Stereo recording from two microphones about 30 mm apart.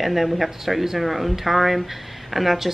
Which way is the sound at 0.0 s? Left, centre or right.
Centre.